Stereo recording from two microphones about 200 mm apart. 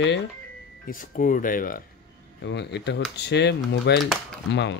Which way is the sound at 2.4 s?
60° left (ahead or behind).